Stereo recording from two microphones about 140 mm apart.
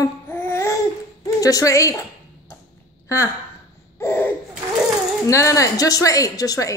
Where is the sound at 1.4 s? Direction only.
25° left (ahead or behind).